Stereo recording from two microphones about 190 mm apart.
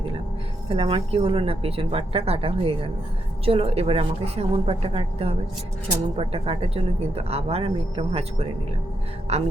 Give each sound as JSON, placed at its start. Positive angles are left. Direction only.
{"t": 0.7, "sound": "speech", "side_deg": -30}